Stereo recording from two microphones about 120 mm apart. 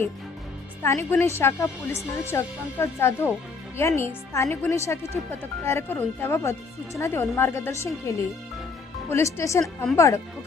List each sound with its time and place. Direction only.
0.8 s speech: 20° left (ahead or behind)